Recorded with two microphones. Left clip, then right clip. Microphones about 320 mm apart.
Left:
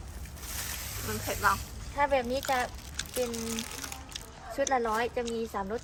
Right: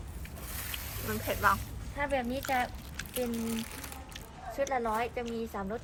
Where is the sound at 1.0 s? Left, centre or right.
Centre.